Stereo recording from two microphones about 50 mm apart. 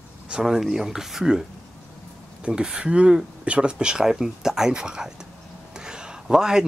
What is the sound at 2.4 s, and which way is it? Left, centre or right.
Speech, centre.